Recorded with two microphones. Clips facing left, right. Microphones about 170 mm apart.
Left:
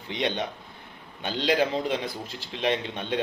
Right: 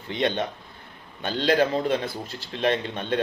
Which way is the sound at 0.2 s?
10° left (ahead or behind).